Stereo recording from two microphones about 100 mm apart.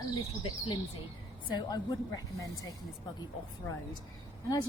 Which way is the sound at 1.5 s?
45° left (ahead or behind).